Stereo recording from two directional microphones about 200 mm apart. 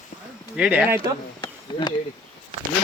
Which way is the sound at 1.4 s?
20° left (ahead or behind).